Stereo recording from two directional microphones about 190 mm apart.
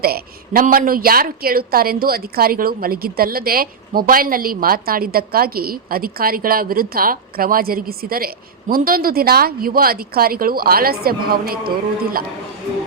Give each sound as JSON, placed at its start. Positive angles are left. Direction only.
{"t": 0.0, "sound": "a woman's voice", "side_deg": -55}